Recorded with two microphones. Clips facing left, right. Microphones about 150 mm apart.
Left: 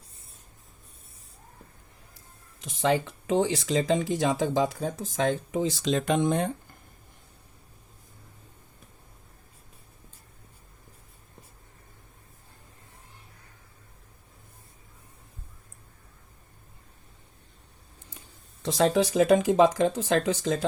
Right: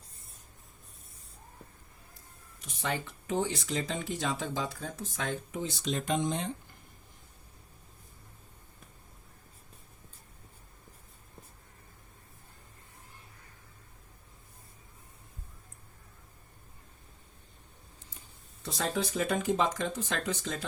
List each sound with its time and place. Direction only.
2.6 s speech: 90° left; by 6.5 s 55° left (ahead or behind)
18.6 s speech: 90° left